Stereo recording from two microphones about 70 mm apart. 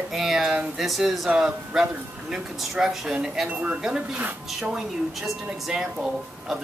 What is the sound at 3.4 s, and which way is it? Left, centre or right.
Speech, centre.